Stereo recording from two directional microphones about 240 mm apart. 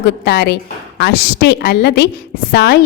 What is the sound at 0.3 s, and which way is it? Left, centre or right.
A woman's voice, left.